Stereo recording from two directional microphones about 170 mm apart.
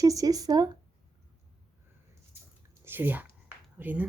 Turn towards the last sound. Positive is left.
turn(degrees=-10)  # may be behind; listen again after turning